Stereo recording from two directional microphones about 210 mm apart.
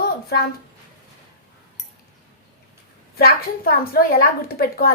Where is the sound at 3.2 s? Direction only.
45° left (ahead or behind).